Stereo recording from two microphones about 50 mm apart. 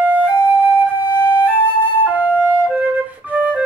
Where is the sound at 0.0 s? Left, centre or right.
Right.